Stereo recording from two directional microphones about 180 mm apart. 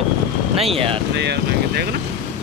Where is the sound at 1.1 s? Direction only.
70° right (ahead or behind).